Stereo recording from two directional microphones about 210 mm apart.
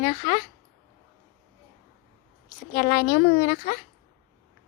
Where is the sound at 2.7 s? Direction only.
40° left (ahead or behind).